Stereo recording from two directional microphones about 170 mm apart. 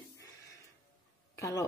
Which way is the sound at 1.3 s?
20° left (ahead or behind).